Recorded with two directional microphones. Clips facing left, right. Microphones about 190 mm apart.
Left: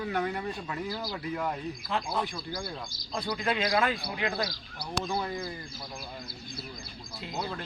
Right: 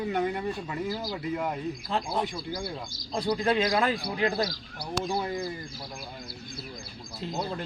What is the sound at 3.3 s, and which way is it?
Speech, 30° right (ahead or behind).